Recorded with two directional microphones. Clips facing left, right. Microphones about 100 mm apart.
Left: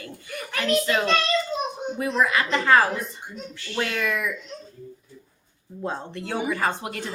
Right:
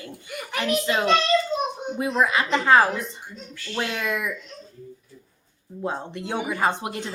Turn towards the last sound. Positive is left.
turn(degrees=-20)  # may be behind; listen again after turning